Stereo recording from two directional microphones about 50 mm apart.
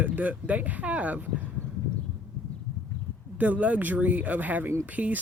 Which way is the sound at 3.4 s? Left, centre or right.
Right.